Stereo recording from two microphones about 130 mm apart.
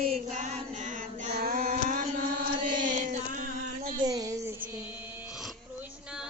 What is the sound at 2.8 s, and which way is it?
Chant, 90° right.